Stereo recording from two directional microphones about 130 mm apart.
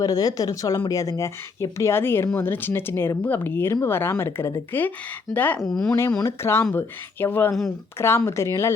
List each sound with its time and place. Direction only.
0.0 s speech: 30° left (ahead or behind); by 6.0 s 5° left (ahead or behind)
6.1 s speech: 30° left (ahead or behind)
6.4 s speech: 20° left (ahead or behind)